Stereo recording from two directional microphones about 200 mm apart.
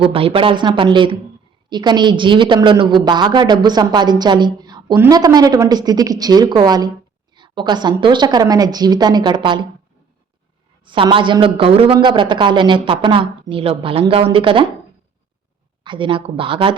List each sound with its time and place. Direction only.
0.0 s a man's voice: 30° right (ahead or behind)
10.8 s a man's voice: 25° right (ahead or behind)
15.8 s a man's voice: 25° right (ahead or behind)